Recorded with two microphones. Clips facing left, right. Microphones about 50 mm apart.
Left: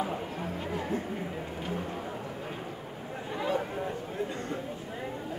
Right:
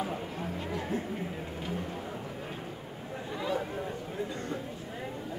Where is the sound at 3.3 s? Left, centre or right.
Left.